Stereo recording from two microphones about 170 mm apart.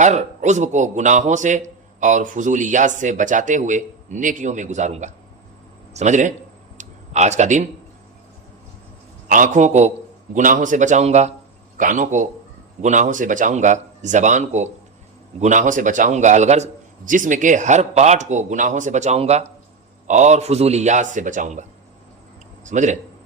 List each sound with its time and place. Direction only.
0.0 s a man's voice: 45° right (ahead or behind)
6.7 s a sound: 45° right (ahead or behind)
9.3 s a man's voice: 50° right (ahead or behind)